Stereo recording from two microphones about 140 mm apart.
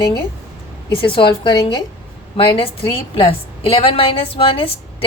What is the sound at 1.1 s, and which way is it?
A woman's voice, 40° left (ahead or behind).